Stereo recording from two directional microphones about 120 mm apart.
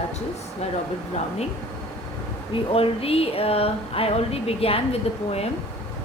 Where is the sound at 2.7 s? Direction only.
55° left (ahead or behind).